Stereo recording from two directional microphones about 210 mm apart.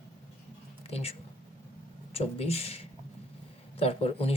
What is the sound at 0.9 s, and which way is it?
Speech, 30° left (ahead or behind).